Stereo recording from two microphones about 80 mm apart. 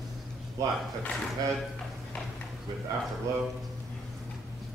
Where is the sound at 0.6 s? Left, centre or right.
Right.